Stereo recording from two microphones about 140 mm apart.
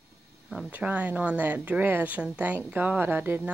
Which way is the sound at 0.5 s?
5° right (ahead or behind).